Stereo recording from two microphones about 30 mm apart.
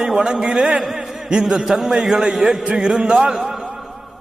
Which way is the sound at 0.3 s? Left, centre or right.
Right.